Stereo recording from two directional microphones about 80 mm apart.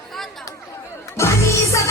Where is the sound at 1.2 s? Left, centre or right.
Left.